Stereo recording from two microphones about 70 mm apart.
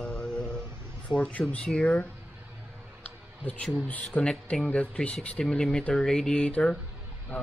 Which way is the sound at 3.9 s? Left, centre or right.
Centre.